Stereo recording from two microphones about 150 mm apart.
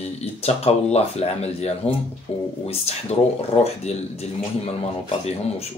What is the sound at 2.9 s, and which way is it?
Speech, 45° left (ahead or behind).